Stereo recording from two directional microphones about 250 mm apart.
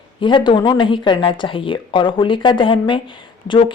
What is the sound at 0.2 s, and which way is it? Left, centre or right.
Speech, centre.